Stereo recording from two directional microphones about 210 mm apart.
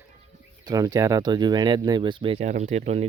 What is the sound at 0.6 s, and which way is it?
Speech, 15° right (ahead or behind).